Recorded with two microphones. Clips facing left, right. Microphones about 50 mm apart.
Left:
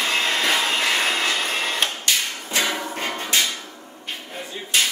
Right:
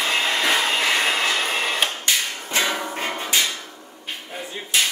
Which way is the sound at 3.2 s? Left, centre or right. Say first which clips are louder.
Left 1 dB; centre.